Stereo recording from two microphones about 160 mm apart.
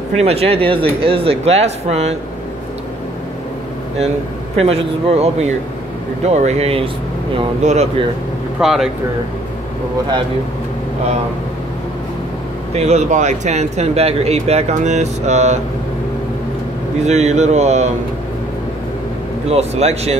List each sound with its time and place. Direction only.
0.2 s speech: 40° right (ahead or behind)
4.6 s speech: 40° right (ahead or behind)
8.5 s speech: 5° right (ahead or behind)
12.7 s speech: 45° right (ahead or behind)
17.0 s speech: 45° right (ahead or behind)
19.5 s speech: 40° right (ahead or behind)